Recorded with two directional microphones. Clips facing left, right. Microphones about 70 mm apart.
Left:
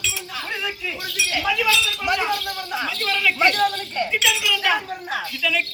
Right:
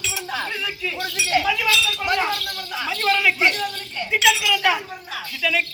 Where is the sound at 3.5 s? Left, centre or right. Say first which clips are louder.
Left 6 dB; left.